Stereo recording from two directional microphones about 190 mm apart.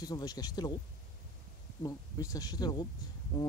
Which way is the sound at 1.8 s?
20° left (ahead or behind).